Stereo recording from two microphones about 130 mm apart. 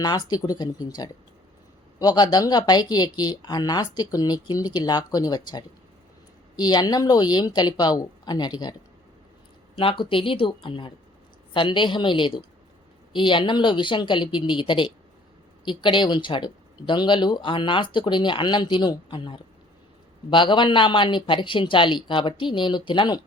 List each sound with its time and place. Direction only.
0.0 s speech: 30° left (ahead or behind)
9.7 s speech: 40° left (ahead or behind)